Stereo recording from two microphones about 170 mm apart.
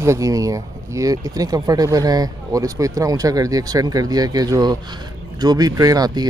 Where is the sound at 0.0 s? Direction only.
20° right (ahead or behind).